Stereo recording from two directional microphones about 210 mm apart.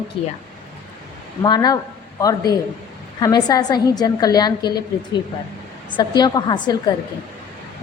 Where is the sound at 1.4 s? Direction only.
20° left (ahead or behind).